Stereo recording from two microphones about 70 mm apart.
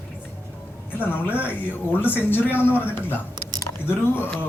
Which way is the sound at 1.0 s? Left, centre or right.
Left.